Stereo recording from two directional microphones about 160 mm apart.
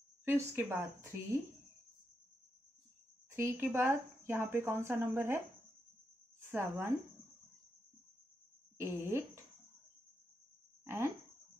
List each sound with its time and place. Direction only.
0.2 s speech: 15° right (ahead or behind)
3.3 s speech: 15° right (ahead or behind)
6.5 s speech: 15° right (ahead or behind)
8.7 s speech: 15° right (ahead or behind)
10.8 s a sound: 15° right (ahead or behind)